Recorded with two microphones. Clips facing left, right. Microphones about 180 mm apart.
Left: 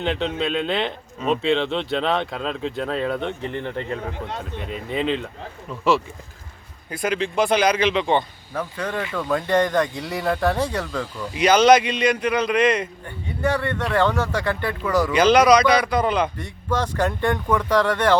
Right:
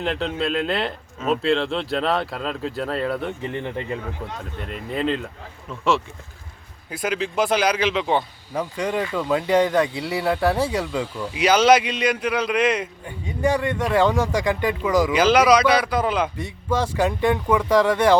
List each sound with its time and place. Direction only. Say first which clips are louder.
0.0 s speech: left 1 dB; centre (ahead or behind)
4.6 s speech: even; centre (ahead or behind)
6.9 s speech: left 1 dB; 5° right (ahead or behind)